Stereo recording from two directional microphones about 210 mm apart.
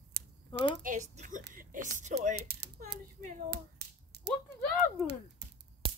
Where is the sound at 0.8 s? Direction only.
35° right (ahead or behind).